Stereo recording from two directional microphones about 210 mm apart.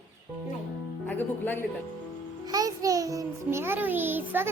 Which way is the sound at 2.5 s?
15° right (ahead or behind).